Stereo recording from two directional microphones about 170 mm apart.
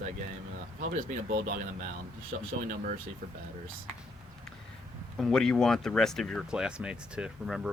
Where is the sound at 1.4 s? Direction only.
50° right (ahead or behind).